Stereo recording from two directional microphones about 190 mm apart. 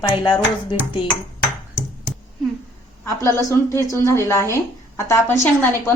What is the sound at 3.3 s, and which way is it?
A woman's voice, 15° left (ahead or behind).